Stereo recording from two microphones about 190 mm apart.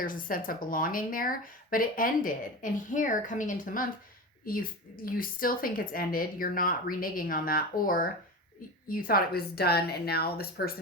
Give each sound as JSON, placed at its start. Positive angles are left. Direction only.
{"t": 0.0, "sound": "a woman's voice", "side_deg": 45}